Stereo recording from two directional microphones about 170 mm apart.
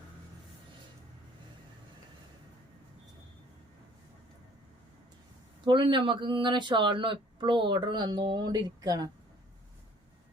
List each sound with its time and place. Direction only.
5.6 s speech: 30° right (ahead or behind)